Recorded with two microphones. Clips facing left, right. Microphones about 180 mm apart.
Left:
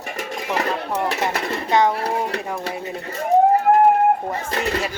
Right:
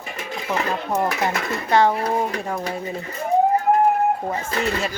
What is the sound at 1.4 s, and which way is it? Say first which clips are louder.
Speech: left 1 dB; 30° left (ahead or behind).